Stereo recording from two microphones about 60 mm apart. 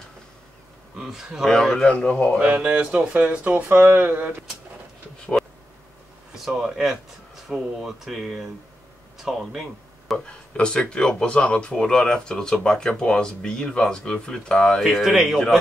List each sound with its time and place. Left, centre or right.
0.9 s speech: centre
1.5 s speech: centre
1.9 s speech: left
2.4 s speech: centre
5.4 s a sound: centre
6.3 s speech: centre
10.1 s speech: centre
14.8 s speech: centre